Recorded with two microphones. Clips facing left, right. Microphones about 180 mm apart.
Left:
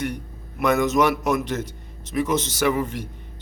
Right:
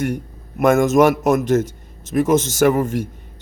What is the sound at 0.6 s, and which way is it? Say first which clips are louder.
A man's voice: right 6 dB; 45° right (ahead or behind).